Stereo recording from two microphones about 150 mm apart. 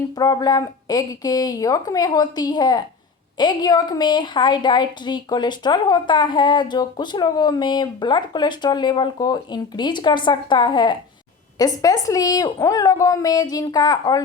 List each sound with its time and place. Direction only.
0.2 s a woman's voice: 25° left (ahead or behind)